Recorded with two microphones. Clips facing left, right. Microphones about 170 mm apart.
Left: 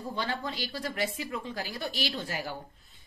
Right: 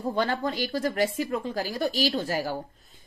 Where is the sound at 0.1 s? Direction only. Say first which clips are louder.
Right 7 dB; 50° right (ahead or behind).